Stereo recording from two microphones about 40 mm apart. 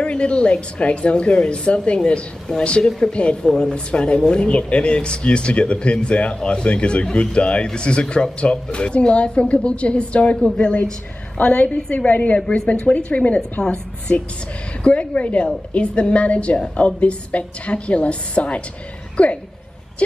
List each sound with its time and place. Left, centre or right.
0.0 s speech: left
11.3 s a woman's voice: left
12.4 s a woman's voice: left